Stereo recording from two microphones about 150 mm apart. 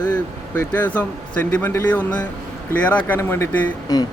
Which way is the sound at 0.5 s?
10° left (ahead or behind).